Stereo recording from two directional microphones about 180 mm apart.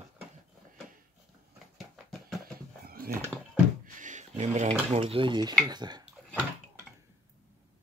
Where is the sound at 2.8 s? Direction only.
55° right (ahead or behind).